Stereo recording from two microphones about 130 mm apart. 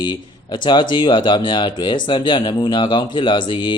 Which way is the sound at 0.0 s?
35° left (ahead or behind).